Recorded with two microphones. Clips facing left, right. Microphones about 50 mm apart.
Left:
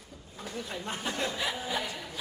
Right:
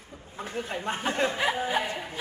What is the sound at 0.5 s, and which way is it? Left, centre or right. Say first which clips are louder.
Speech: right 5 dB; right.